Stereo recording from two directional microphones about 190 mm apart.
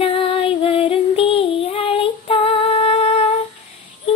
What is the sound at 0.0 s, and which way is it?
Music, 30° left (ahead or behind).